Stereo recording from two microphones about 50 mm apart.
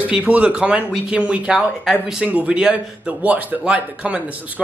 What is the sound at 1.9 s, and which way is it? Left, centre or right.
Speech, centre.